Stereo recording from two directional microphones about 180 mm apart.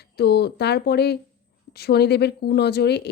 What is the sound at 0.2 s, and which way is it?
Speech, 65° left (ahead or behind).